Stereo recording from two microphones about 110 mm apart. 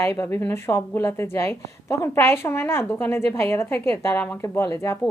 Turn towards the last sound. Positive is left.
turn(degrees=25)  # may be behind; listen again after turning